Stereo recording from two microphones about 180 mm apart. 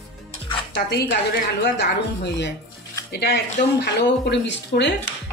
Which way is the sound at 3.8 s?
70° left (ahead or behind).